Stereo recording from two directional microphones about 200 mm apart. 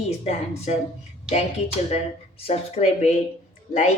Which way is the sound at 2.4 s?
30° left (ahead or behind).